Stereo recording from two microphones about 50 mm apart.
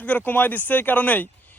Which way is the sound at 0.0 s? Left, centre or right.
Left.